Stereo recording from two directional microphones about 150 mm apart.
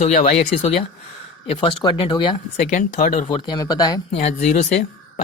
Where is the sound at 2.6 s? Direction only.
55° left (ahead or behind).